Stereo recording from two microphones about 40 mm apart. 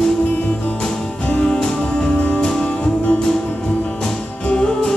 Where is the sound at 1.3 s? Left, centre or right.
Left.